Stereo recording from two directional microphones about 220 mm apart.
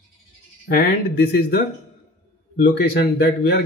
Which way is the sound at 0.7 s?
45° left (ahead or behind).